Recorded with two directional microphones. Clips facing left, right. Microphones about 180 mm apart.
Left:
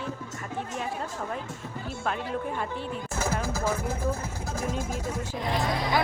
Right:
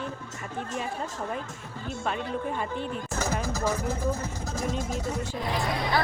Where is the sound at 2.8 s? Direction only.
5° left (ahead or behind).